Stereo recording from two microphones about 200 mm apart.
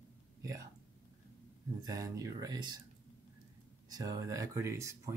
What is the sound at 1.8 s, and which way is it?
Speech, 15° right (ahead or behind).